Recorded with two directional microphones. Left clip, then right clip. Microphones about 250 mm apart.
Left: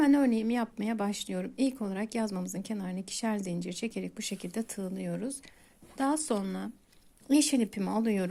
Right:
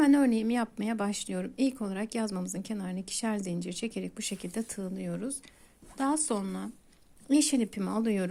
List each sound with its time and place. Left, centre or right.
0.0 s a woman's voice: centre